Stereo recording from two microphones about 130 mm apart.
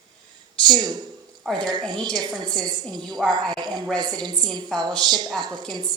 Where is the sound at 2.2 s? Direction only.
30° right (ahead or behind).